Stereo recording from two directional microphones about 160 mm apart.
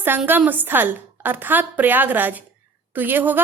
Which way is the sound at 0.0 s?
10° right (ahead or behind).